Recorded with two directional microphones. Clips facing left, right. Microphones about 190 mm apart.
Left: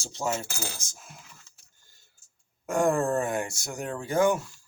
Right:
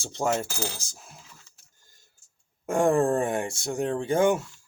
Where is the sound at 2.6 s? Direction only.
25° right (ahead or behind).